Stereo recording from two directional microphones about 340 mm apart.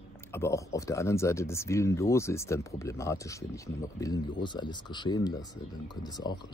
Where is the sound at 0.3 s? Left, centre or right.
Centre.